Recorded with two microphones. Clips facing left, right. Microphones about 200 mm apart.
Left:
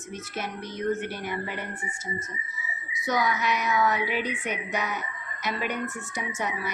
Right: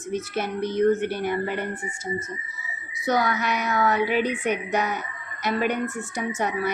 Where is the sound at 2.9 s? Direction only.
60° right (ahead or behind).